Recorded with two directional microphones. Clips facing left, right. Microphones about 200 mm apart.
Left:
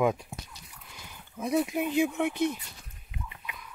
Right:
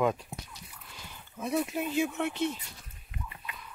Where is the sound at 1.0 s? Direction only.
15° left (ahead or behind).